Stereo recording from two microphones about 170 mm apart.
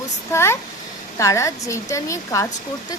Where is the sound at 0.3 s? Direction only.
15° left (ahead or behind).